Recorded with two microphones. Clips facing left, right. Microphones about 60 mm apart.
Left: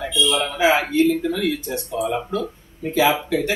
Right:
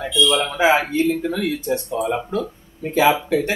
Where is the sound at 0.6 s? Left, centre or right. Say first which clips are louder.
Left 1 dB; right.